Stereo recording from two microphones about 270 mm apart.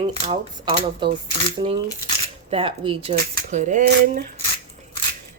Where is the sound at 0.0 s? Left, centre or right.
Centre.